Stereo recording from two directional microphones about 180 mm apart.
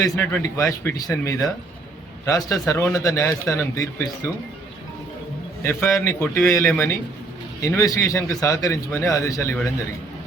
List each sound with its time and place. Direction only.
0.0 s a man's voice: 10° left (ahead or behind)
5.6 s a man's voice: 15° left (ahead or behind)